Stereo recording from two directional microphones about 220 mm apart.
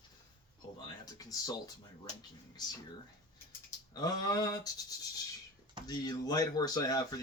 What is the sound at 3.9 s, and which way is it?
Speech, 15° left (ahead or behind).